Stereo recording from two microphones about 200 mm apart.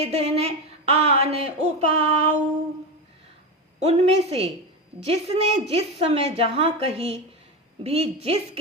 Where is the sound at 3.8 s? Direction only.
30° right (ahead or behind).